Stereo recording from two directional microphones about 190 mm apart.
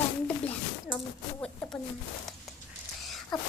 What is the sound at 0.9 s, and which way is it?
Speech, 5° left (ahead or behind).